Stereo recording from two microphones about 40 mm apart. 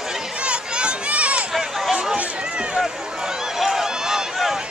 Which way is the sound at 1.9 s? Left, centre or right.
Centre.